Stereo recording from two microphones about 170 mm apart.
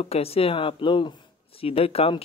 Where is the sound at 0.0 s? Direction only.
35° left (ahead or behind).